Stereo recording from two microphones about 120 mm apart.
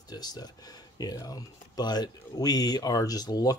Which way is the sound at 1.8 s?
35° left (ahead or behind).